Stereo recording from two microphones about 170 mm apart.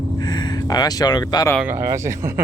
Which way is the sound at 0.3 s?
25° left (ahead or behind).